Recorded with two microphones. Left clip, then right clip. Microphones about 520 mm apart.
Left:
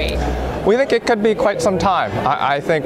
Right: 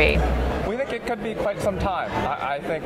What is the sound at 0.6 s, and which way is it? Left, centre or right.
Speech, left.